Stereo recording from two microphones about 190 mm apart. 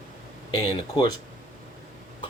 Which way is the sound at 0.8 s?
25° left (ahead or behind).